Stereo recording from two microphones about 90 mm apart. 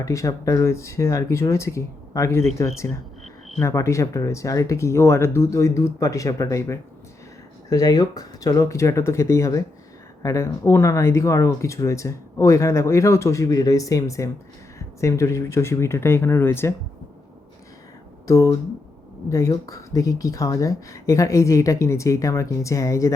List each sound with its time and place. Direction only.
0.0 s speech: 35° left (ahead or behind)
7.7 s speech: 45° left (ahead or behind); by 16.7 s 25° left (ahead or behind)
18.3 s speech: 35° left (ahead or behind)